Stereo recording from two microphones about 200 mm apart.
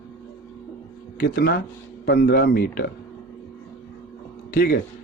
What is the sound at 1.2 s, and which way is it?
Speech, 50° left (ahead or behind).